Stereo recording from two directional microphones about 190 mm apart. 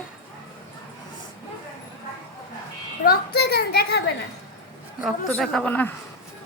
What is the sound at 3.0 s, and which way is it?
A woman's voice, 55° left (ahead or behind).